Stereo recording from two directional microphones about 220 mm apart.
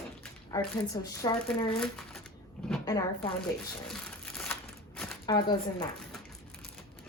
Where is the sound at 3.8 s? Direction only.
Centre (ahead or behind).